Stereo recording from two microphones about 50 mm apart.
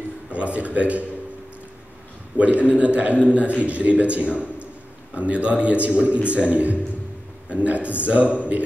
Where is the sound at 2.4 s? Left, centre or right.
Right.